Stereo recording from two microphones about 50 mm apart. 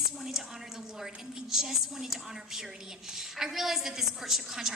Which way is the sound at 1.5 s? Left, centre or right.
Centre.